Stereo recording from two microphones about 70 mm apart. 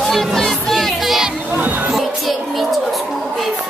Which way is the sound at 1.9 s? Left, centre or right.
Centre.